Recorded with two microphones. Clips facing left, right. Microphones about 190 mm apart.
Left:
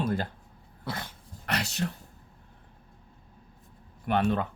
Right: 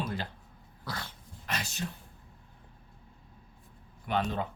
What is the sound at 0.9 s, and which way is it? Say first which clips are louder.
Dog: left 4 dB; 20° left (ahead or behind).